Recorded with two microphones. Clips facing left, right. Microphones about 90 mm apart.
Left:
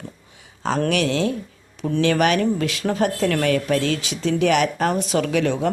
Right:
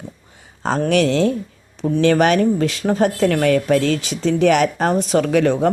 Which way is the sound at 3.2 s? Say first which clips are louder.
Right 5 dB; 45° right (ahead or behind).